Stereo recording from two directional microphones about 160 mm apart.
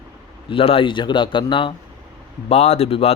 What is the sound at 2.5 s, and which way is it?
Speech, 40° left (ahead or behind).